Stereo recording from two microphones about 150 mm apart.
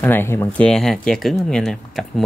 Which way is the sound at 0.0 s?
15° left (ahead or behind).